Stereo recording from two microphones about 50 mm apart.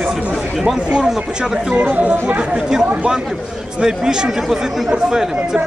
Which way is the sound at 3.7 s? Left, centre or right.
Centre.